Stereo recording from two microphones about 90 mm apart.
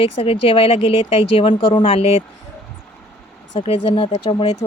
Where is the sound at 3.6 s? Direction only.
90° left; by 4.5 s 55° left (ahead or behind).